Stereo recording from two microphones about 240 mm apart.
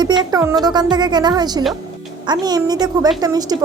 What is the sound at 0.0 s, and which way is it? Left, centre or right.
A woman's voice, centre.